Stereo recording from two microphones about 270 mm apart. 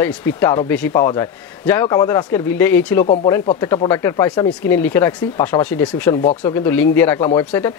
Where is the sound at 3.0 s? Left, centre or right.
Left.